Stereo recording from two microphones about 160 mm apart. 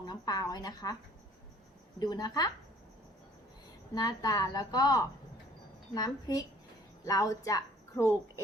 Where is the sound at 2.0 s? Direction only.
25° left (ahead or behind).